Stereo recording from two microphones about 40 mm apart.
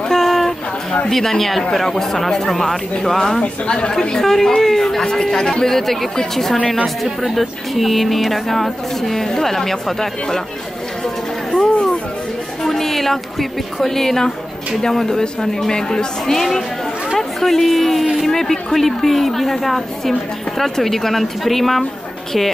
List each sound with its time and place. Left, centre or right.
0.1 s a sound: centre
1.1 s speech: centre
3.6 s speech: left
4.0 s a woman's voice: centre
11.5 s speech: centre
12.6 s speech: centre
16.3 s a woman's voice: centre